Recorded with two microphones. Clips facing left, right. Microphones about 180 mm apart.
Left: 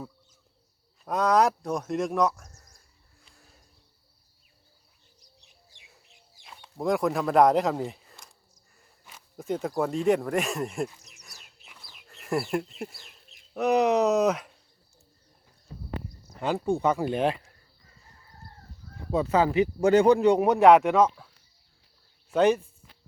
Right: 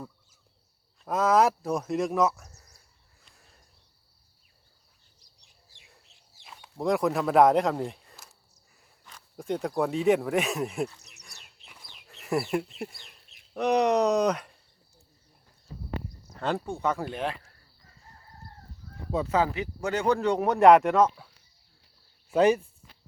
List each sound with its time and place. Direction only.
1.0 s speech: centre (ahead or behind)
3.2 s a sound: centre (ahead or behind)
5.7 s bird: 15° left (ahead or behind)
6.4 s speech: 5° right (ahead or behind)
11.2 s chirp: 5° left (ahead or behind)
11.9 s speech: centre (ahead or behind)
16.4 s speech: 10° left (ahead or behind)
19.1 s speech: 20° left (ahead or behind); by 21.2 s centre (ahead or behind)
22.3 s speech: 5° right (ahead or behind)